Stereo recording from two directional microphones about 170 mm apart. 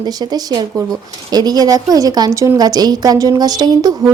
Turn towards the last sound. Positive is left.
turn(degrees=-25)  # may be behind; listen again after turning